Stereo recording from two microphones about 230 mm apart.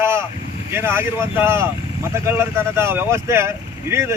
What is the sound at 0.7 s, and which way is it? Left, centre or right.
Speech, centre.